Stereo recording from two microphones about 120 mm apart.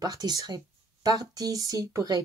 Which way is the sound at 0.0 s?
35° right (ahead or behind).